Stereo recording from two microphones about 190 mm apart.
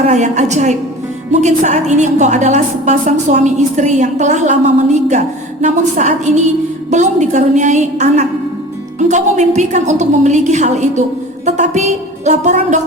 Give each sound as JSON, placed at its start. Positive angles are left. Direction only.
{"t": 0.1, "sound": "a woman's voice", "side_deg": -40}